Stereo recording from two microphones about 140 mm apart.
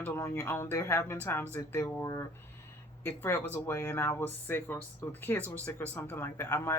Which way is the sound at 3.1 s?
15° left (ahead or behind).